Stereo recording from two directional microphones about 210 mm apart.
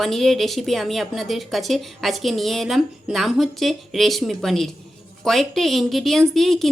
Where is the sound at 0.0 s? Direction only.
Centre (ahead or behind).